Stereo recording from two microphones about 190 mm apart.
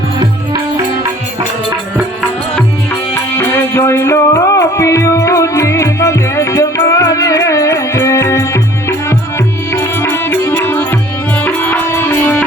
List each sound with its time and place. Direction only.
3.3 s music: 10° left (ahead or behind)